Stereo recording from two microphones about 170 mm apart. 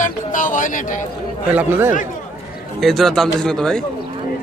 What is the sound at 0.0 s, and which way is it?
Speech, 50° left (ahead or behind).